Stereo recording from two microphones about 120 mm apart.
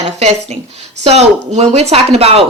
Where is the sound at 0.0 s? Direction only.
65° right (ahead or behind).